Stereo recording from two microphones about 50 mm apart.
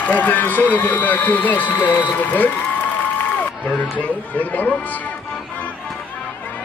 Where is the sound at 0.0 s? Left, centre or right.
Left.